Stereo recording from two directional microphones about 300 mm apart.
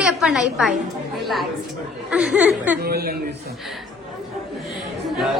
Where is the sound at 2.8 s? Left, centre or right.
Right.